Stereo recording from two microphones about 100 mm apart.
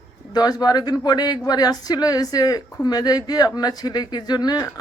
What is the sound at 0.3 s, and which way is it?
Speech, 40° left (ahead or behind).